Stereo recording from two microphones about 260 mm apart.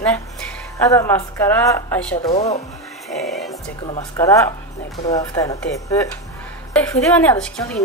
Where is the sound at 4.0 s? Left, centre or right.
Centre.